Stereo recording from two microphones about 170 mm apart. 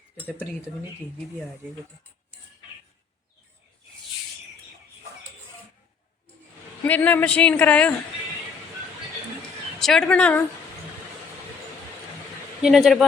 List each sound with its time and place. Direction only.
6.8 s speech: 10° left (ahead or behind)
9.8 s speech: 5° left (ahead or behind)
12.6 s speech: centre (ahead or behind)